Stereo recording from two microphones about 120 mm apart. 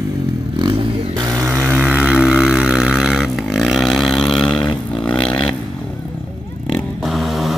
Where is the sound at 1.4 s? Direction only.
15° right (ahead or behind); by 5.5 s 5° left (ahead or behind).